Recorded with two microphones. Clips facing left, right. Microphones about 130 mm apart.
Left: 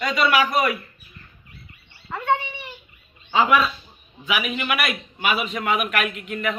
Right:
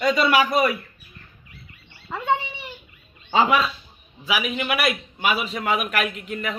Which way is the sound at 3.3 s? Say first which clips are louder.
Left 1 dB; 30° right (ahead or behind).